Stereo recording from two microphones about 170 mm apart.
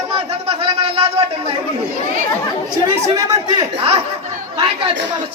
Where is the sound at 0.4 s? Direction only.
35° right (ahead or behind).